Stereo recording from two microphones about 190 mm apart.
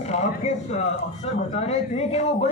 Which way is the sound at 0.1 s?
35° left (ahead or behind).